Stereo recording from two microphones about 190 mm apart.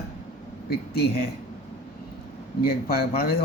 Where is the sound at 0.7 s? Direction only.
55° left (ahead or behind).